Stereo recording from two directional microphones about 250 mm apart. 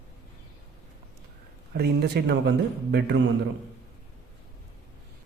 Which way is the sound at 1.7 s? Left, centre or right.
Right.